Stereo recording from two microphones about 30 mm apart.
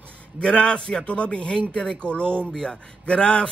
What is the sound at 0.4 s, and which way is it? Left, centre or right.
A man's voice, left.